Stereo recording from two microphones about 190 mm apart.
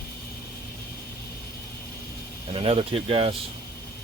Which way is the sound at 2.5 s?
30° right (ahead or behind).